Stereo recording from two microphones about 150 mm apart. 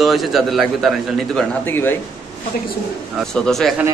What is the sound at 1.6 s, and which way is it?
Speech, 15° left (ahead or behind).